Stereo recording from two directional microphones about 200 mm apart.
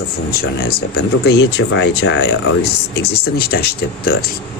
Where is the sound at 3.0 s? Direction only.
50° left (ahead or behind).